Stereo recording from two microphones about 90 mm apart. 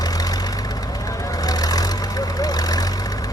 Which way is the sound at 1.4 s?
45° left (ahead or behind).